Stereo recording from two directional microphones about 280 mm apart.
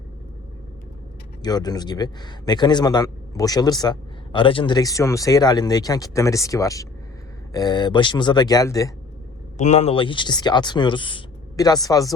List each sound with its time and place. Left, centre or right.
1.4 s a man's voice: centre
9.6 s a man's voice: left